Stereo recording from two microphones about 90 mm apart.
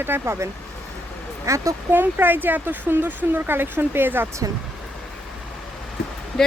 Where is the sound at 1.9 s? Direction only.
20° right (ahead or behind).